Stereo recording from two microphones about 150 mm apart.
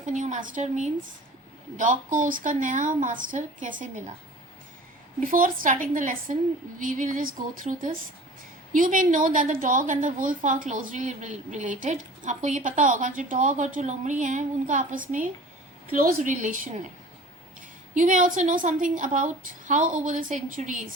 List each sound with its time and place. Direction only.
0.0 s a woman's voice: 55° right (ahead or behind)
5.2 s a woman's voice: 65° right (ahead or behind)
17.9 s a woman's voice: 60° right (ahead or behind)